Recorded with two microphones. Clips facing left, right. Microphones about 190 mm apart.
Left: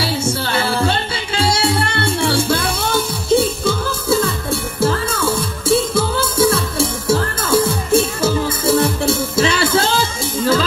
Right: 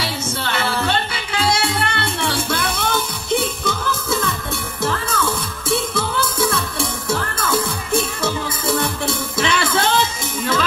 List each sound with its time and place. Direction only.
0.0 s music: 30° left (ahead or behind)